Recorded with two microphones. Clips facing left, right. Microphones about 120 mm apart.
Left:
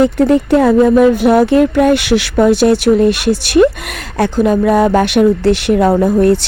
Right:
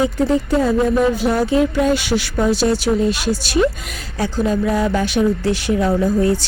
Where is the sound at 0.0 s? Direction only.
65° left (ahead or behind).